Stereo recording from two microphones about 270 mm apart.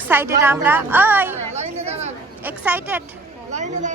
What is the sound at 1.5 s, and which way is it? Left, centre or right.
Chatter, right.